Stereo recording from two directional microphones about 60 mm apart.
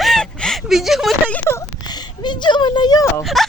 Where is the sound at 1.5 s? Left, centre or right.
Left.